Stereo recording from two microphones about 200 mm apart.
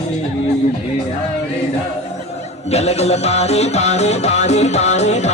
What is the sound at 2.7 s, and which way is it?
Music, 35° left (ahead or behind).